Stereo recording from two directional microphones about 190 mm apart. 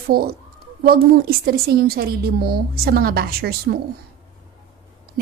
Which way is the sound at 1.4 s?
55° right (ahead or behind).